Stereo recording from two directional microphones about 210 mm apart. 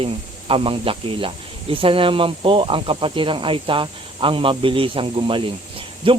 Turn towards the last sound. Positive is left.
turn(degrees=-25)  # may be behind; listen again after turning